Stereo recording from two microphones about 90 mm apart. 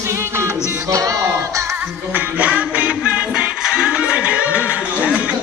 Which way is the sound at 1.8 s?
15° right (ahead or behind).